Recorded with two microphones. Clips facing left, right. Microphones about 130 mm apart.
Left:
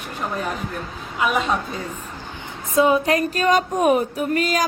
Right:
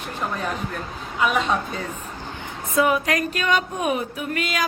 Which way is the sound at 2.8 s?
30° left (ahead or behind).